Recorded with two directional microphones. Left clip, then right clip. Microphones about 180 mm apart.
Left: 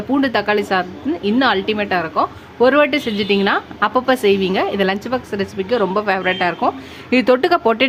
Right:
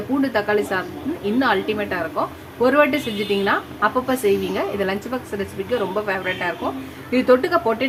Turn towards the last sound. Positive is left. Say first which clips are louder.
# left 5 dB
turn(degrees=45)  # may be behind; listen again after turning